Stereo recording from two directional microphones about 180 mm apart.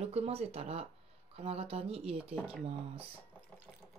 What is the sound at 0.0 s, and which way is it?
Speech, 35° right (ahead or behind).